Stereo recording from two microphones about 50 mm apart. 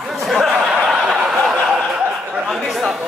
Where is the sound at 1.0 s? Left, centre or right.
Right.